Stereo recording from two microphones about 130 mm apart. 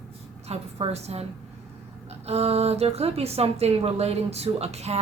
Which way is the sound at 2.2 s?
55° right (ahead or behind).